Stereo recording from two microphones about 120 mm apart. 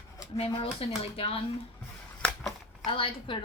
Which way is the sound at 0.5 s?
50° left (ahead or behind).